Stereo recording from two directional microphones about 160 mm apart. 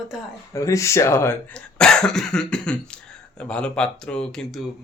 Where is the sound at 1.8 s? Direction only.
5° left (ahead or behind).